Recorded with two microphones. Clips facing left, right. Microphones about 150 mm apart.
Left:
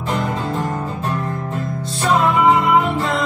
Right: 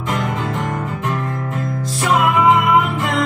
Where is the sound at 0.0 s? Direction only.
30° left (ahead or behind).